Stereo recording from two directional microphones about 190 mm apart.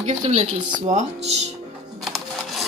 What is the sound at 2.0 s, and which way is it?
Music, centre (ahead or behind).